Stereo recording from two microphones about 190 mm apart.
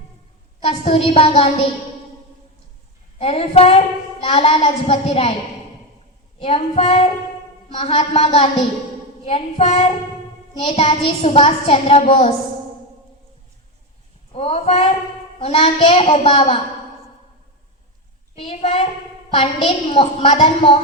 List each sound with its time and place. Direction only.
0.6 s a woman's voice: 30° left (ahead or behind)
3.2 s a woman's voice: 30° left (ahead or behind)
6.4 s a woman's voice: 25° left (ahead or behind)
14.3 s a woman's voice: 30° left (ahead or behind)
18.3 s a woman's voice: 30° left (ahead or behind)